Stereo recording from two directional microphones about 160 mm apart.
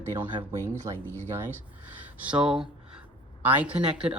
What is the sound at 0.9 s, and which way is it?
Speech, 20° right (ahead or behind).